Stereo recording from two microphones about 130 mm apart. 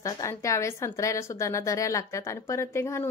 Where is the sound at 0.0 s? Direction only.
25° left (ahead or behind).